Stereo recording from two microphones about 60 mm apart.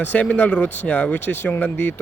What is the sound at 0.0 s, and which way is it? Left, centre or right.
Speech, left.